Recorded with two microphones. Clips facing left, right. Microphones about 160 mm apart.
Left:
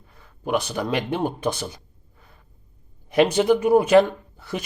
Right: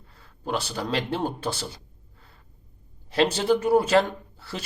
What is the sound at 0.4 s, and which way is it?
Speech, 15° left (ahead or behind).